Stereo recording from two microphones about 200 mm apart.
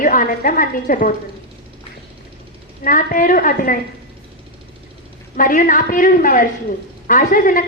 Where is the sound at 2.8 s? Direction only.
40° left (ahead or behind).